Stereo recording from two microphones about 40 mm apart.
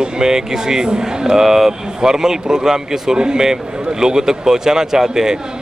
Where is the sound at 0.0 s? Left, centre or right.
Centre.